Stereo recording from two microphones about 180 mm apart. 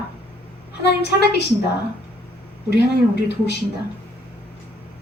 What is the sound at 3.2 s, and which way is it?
Speech, 70° left (ahead or behind).